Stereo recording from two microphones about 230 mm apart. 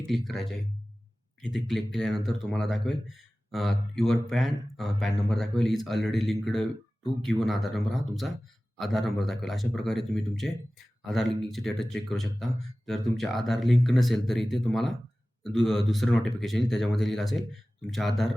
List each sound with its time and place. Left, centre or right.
0.1 s speech: centre